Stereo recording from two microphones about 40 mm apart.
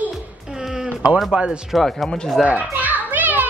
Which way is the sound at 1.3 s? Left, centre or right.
Right.